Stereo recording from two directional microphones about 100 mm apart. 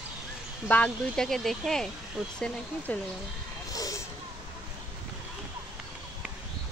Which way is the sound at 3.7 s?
35° left (ahead or behind).